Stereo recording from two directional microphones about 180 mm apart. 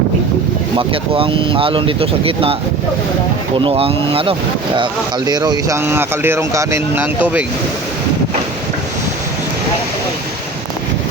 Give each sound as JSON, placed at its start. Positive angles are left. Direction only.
{"t": 0.8, "sound": "speech", "side_deg": -30}
{"t": 3.6, "sound": "speech", "side_deg": -30}